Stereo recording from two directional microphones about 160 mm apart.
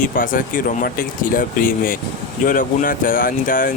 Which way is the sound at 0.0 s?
60° left (ahead or behind).